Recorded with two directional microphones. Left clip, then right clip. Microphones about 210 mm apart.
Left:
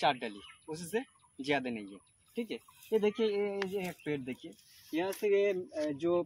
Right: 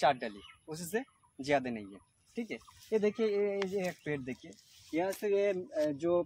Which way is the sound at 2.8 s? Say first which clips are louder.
Left 1 dB; 25° right (ahead or behind).